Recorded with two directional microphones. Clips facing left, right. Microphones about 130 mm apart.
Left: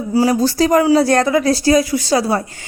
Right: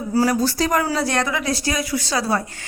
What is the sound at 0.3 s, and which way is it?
Speech, 25° left (ahead or behind).